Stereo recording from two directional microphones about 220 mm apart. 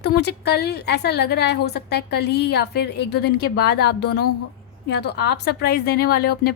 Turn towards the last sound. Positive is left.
turn(degrees=45)  # may be behind; listen again after turning